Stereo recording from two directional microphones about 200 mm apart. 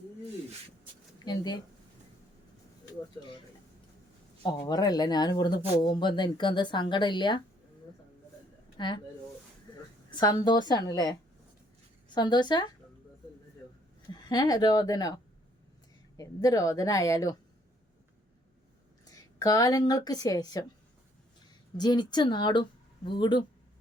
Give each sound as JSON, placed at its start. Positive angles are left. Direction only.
{"t": 1.2, "sound": "speech", "side_deg": 20}
{"t": 4.4, "sound": "speech", "side_deg": 20}
{"t": 8.8, "sound": "speech", "side_deg": 20}
{"t": 10.2, "sound": "speech", "side_deg": 20}
{"t": 14.1, "sound": "a woman's voice", "side_deg": 20}
{"t": 19.1, "sound": "speech", "side_deg": 15}
{"t": 21.8, "sound": "speech", "side_deg": 20}